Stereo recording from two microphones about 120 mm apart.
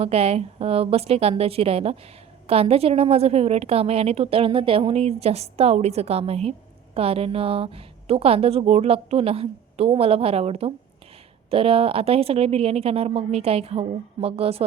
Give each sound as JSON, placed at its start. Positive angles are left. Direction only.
{"t": 0.0, "sound": "a woman's voice", "side_deg": -60}